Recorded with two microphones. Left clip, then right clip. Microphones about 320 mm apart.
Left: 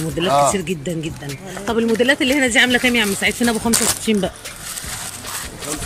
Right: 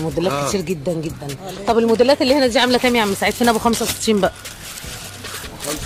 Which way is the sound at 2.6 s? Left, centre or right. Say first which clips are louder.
Even; right.